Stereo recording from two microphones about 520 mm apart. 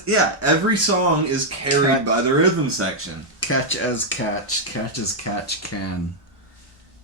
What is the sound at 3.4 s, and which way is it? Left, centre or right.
Cutlery, left.